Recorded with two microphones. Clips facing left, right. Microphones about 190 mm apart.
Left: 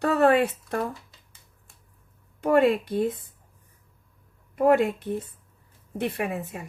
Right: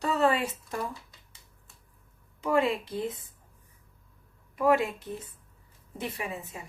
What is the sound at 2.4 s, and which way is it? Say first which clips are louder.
Speech: left 6 dB; 55° left (ahead or behind).